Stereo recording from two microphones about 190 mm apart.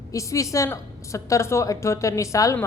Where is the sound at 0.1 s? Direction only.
15° left (ahead or behind).